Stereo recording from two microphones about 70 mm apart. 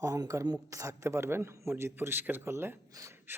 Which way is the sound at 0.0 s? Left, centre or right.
Right.